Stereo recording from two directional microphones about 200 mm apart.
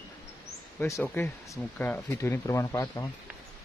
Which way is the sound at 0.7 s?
10° left (ahead or behind).